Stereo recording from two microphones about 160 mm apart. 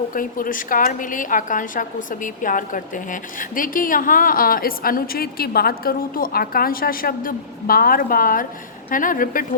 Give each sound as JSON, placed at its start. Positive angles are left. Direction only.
{"t": 0.1, "sound": "a woman's voice", "side_deg": 60}